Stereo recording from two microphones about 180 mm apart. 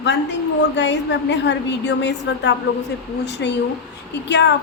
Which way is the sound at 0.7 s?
75° left (ahead or behind).